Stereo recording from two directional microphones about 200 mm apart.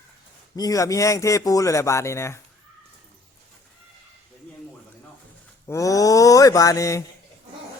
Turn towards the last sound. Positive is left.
turn(degrees=15)  # may be behind; listen again after turning